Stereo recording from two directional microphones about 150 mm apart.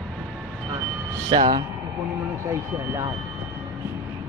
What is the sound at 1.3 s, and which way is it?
Speech, 30° right (ahead or behind).